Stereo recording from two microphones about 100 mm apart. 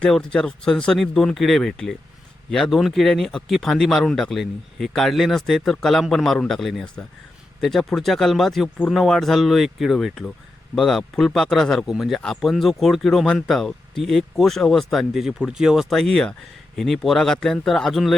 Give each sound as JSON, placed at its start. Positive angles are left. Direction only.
{"t": 0.0, "sound": "speech", "side_deg": 5}